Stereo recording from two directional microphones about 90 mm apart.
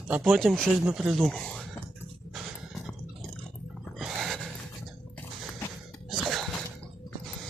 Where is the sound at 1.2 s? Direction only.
5° left (ahead or behind).